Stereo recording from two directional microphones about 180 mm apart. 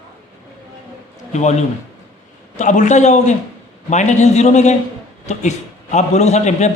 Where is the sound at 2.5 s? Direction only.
45° left (ahead or behind).